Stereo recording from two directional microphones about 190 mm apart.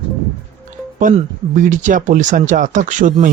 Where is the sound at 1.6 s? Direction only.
45° right (ahead or behind).